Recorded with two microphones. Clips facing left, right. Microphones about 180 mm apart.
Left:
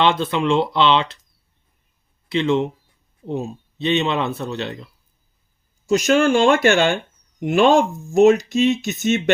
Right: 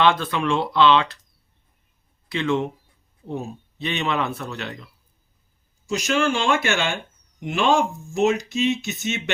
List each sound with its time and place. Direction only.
0.0 s speech: 25° left (ahead or behind)
2.3 s speech: 25° left (ahead or behind)
5.9 s speech: 45° left (ahead or behind)